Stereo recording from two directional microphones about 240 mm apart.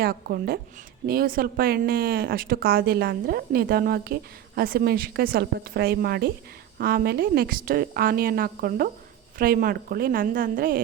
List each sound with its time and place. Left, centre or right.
0.0 s speech: right